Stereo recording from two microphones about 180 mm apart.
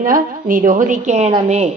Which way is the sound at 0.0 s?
50° right (ahead or behind).